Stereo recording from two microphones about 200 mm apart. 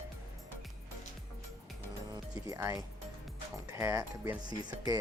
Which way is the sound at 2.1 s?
15° right (ahead or behind).